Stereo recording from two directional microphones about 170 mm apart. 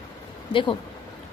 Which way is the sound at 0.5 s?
30° left (ahead or behind).